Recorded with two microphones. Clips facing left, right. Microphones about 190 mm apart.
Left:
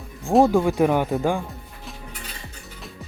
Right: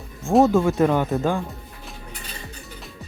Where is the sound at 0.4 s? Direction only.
15° left (ahead or behind).